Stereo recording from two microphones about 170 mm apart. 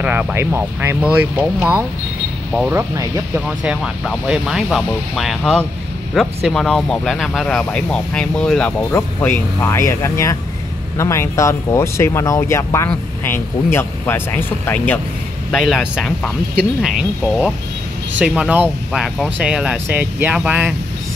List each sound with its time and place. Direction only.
0.0 s speech: 10° right (ahead or behind)
3.3 s speech: 5° right (ahead or behind)